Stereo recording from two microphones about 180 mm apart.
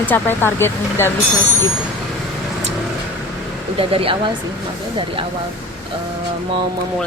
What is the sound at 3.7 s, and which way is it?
Speech, 30° right (ahead or behind).